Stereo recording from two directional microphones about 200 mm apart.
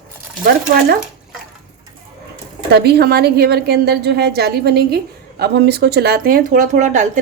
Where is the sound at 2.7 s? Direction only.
55° right (ahead or behind).